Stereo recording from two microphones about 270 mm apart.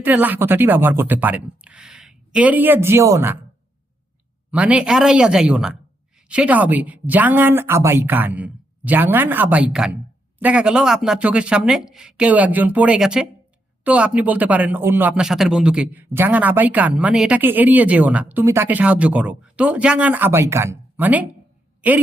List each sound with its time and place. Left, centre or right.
0.0 s a woman's voice: centre
4.5 s a man's voice: centre
21.8 s a sound: centre